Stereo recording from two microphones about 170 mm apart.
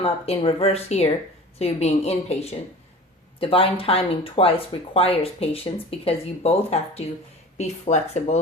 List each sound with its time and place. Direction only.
0.0 s speech: 35° left (ahead or behind)